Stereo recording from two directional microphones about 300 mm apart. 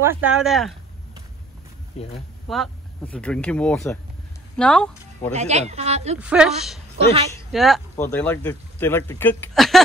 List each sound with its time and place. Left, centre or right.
0.0 s speech: centre
2.0 s speech: left
2.4 s speech: centre
5.3 s speech: right
6.1 s speech: centre